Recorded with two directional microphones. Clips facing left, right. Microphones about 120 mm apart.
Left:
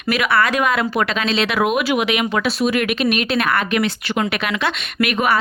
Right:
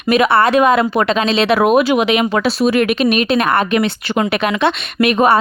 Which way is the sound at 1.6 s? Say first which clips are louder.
Right 5 dB; 40° right (ahead or behind).